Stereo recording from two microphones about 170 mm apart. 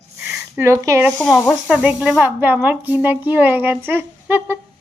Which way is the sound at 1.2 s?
Centre (ahead or behind).